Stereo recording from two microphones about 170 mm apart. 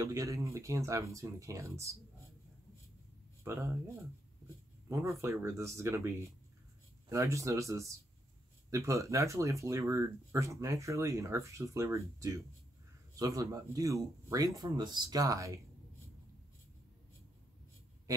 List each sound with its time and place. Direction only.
0.0 s speech: 20° right (ahead or behind)
3.4 s speech: 15° right (ahead or behind)